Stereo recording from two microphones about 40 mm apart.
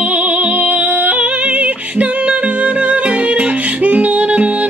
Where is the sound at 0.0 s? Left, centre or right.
Right.